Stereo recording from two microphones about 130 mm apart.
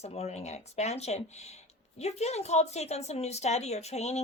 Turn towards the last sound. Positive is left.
turn(degrees=55)  # may be behind; listen again after turning